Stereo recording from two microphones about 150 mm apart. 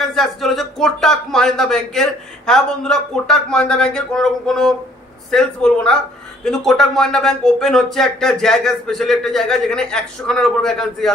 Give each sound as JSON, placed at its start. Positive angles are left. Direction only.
{"t": 0.0, "sound": "speech", "side_deg": 0}